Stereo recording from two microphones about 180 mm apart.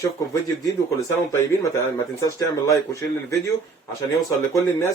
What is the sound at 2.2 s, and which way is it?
Speech, 15° left (ahead or behind).